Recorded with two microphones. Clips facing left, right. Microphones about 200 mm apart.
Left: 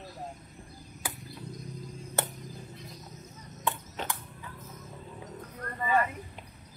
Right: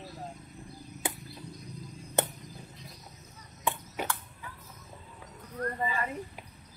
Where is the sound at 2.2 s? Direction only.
20° right (ahead or behind).